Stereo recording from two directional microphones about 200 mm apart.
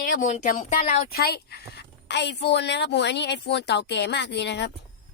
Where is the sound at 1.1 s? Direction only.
50° left (ahead or behind).